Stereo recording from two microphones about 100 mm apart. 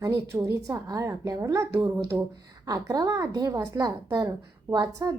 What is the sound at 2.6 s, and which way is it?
A woman's voice, 40° right (ahead or behind).